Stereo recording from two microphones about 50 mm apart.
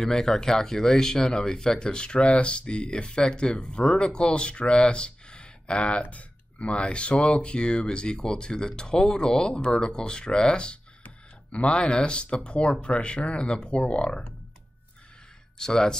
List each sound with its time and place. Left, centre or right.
0.0 s speech: centre
15.5 s speech: centre